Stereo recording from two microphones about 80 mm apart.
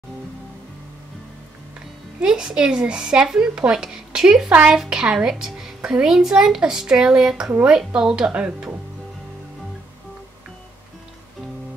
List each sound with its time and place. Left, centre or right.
2.2 s a woman's voice: centre